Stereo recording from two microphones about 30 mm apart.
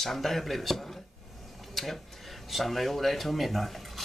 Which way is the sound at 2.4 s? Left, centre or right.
Centre.